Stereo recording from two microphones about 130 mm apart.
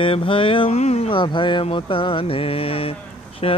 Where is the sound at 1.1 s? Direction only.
40° left (ahead or behind).